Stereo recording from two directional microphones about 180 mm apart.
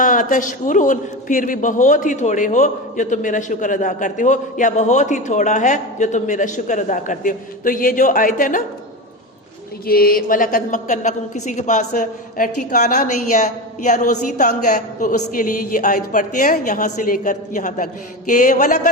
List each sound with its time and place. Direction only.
0.0 s a man's voice: 45° left (ahead or behind)
9.8 s a man's voice: 55° left (ahead or behind)